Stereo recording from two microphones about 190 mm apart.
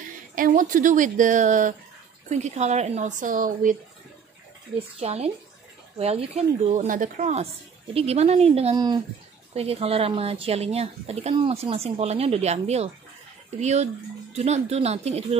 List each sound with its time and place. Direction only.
0.4 s a woman's voice: 45° right (ahead or behind)
4.7 s speech: 30° right (ahead or behind)